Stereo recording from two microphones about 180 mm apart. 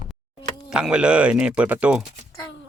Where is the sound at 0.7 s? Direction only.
5° right (ahead or behind).